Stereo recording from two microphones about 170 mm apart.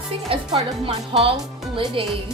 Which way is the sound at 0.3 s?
35° right (ahead or behind).